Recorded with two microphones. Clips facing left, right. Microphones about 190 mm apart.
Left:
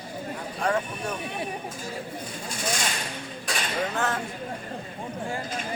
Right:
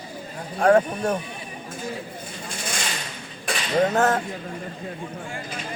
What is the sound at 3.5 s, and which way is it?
Cutlery, 55° right (ahead or behind).